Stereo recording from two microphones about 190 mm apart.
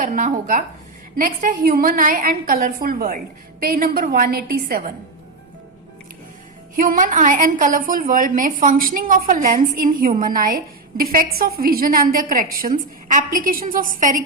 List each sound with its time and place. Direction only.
0.0 s a woman's voice: 45° right (ahead or behind)
6.7 s a woman's voice: 45° right (ahead or behind)